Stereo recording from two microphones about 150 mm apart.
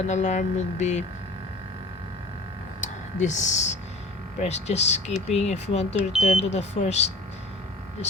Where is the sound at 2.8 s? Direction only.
55° left (ahead or behind).